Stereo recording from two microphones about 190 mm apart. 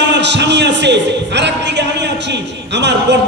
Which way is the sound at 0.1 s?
65° right (ahead or behind).